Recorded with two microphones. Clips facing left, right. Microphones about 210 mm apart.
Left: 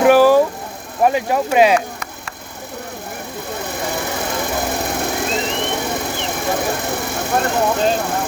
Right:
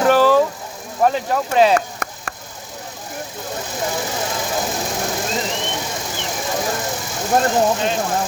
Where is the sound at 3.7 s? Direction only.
60° left (ahead or behind).